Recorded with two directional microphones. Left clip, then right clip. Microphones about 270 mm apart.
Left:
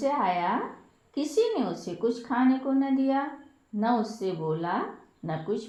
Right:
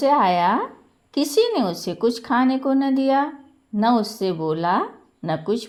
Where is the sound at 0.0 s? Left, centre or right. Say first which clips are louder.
Right 9 dB; right.